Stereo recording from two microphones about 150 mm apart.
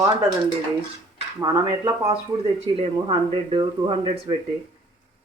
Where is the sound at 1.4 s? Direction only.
25° right (ahead or behind).